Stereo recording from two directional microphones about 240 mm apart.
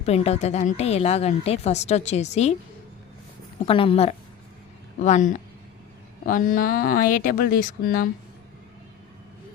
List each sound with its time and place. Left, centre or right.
0.0 s a woman's voice: left
3.7 s a woman's voice: left